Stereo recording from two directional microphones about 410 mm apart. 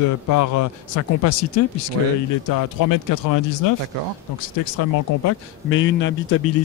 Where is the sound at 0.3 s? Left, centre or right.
Left.